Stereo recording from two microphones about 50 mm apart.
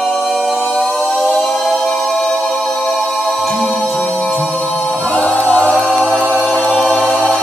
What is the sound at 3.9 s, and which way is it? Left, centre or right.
Music, left.